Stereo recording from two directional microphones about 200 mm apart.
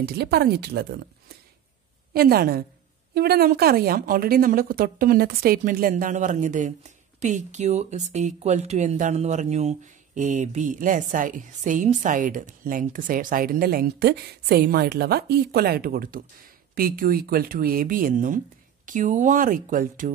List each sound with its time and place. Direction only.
0.0 s a woman's voice: 55° right (ahead or behind)
2.1 s a woman's voice: 50° right (ahead or behind)